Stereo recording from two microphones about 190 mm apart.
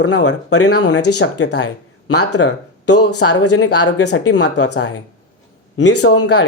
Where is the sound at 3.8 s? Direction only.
65° left (ahead or behind).